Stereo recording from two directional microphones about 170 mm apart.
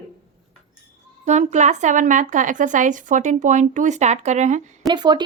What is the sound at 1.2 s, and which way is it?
A woman's voice, 40° right (ahead or behind).